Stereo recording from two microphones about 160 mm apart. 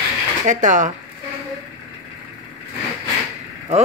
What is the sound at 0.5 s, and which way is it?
Speech, 50° right (ahead or behind).